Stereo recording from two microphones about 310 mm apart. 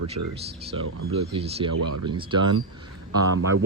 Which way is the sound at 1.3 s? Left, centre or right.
Centre.